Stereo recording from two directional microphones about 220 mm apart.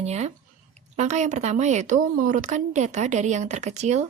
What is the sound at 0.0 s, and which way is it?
A woman's voice, 30° right (ahead or behind).